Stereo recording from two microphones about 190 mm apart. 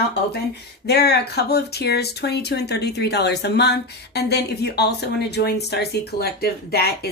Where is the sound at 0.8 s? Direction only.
60° left (ahead or behind).